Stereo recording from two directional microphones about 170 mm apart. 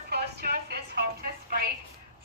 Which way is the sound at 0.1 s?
70° right (ahead or behind).